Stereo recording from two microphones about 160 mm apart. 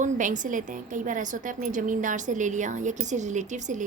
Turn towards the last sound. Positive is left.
turn(degrees=-50)  # may be behind; listen again after turning